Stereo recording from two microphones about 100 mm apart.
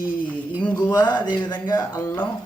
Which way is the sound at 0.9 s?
50° left (ahead or behind).